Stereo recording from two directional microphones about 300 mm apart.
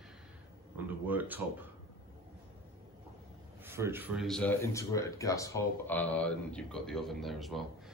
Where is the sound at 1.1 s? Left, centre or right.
Centre.